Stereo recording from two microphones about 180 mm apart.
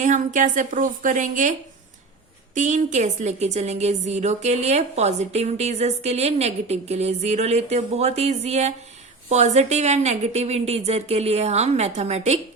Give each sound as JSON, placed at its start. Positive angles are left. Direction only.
{"t": 0.0, "sound": "a woman's voice", "side_deg": -45}
{"t": 2.6, "sound": "a woman's voice", "side_deg": -40}